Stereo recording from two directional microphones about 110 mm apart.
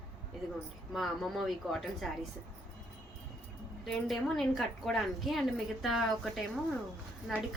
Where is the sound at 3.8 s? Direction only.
Centre (ahead or behind).